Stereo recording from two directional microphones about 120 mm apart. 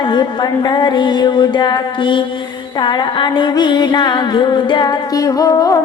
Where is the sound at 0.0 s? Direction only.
35° left (ahead or behind).